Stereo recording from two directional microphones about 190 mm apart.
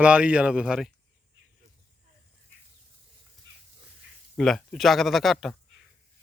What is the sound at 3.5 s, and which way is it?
Dog, 75° right (ahead or behind).